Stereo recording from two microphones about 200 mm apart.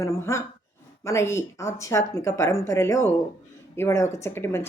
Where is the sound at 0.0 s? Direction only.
15° left (ahead or behind).